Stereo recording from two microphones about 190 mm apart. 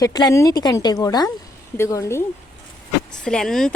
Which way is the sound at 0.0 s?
20° left (ahead or behind).